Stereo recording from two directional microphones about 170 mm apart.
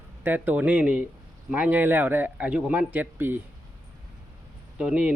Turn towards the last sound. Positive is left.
turn(degrees=-5)  # may be behind; listen again after turning